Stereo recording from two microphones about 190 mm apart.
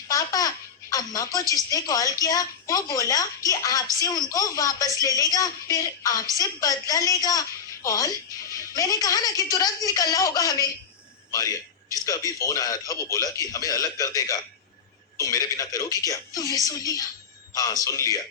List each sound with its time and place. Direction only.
0.1 s a child's voice: 20° left (ahead or behind)
4.9 s a woman's voice: 15° right (ahead or behind)
5.1 s a man's voice: 20° left (ahead or behind)
11.3 s a sound: 20° left (ahead or behind)
12.0 s a man's voice: 20° left (ahead or behind)